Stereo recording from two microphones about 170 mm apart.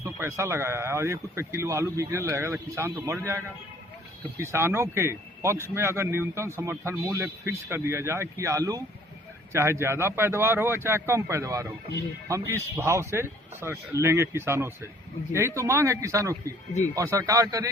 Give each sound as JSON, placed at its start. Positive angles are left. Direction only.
{"t": 0.0, "sound": "a man's voice", "side_deg": -15}
{"t": 4.5, "sound": "a man's voice", "side_deg": -15}